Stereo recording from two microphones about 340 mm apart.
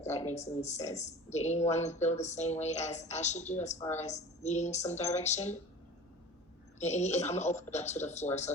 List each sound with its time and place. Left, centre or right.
0.0 s speech: centre
6.7 s speech: centre